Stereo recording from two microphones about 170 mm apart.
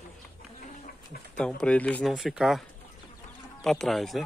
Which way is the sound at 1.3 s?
5° left (ahead or behind).